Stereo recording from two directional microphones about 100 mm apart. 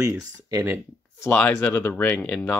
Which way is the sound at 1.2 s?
25° left (ahead or behind).